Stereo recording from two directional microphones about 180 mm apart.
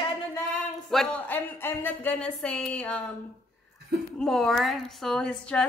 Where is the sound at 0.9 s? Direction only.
5° left (ahead or behind).